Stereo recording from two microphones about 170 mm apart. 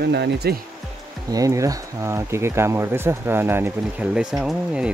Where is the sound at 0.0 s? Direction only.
80° right.